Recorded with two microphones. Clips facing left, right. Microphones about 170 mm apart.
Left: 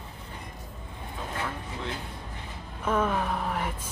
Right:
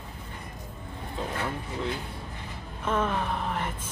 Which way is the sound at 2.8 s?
5° left (ahead or behind).